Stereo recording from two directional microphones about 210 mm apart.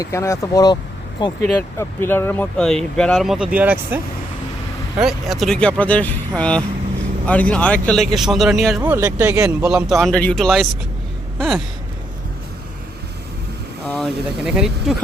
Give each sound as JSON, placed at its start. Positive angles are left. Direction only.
{"t": 0.0, "sound": "speech", "side_deg": 15}
{"t": 1.8, "sound": "speech", "side_deg": 10}
{"t": 11.3, "sound": "gasp", "side_deg": 0}
{"t": 13.8, "sound": "speech", "side_deg": 0}